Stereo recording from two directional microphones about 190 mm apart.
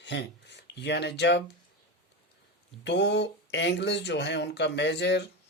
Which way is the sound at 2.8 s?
65° left (ahead or behind).